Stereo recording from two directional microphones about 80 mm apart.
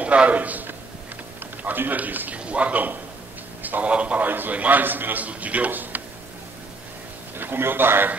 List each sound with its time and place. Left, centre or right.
0.0 s a man's voice: centre
7.3 s a man's voice: right